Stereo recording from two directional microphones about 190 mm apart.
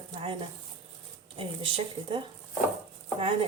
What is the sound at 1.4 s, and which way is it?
Speech, 30° right (ahead or behind).